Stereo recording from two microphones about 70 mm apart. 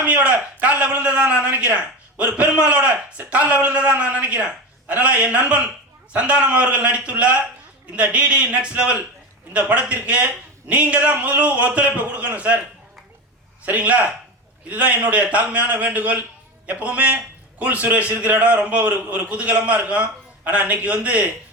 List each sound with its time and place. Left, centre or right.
0.0 s a sound: centre
0.6 s a man's voice: right
13.7 s a man's voice: right